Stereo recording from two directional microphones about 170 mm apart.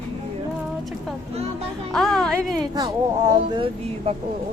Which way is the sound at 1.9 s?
Centre (ahead or behind).